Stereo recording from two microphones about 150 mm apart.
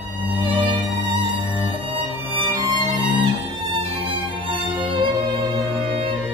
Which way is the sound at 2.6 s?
30° right (ahead or behind).